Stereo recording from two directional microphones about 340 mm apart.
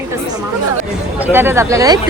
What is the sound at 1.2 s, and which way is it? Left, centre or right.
Speech, centre.